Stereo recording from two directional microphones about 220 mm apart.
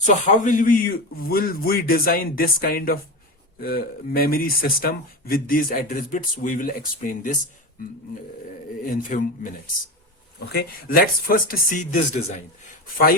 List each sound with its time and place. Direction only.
0.0 s speech: 35° left (ahead or behind)
8.9 s speech: 35° left (ahead or behind)
10.5 s speech: 45° left (ahead or behind)